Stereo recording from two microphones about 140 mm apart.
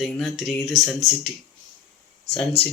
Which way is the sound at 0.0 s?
Centre (ahead or behind).